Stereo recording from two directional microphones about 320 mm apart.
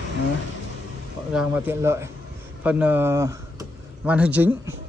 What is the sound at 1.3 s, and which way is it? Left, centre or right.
A man's voice, centre.